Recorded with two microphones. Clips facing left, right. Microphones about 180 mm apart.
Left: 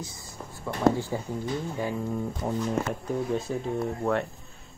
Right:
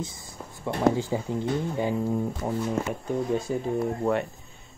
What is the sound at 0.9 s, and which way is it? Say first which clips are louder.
Speech: right 3 dB; 15° right (ahead or behind).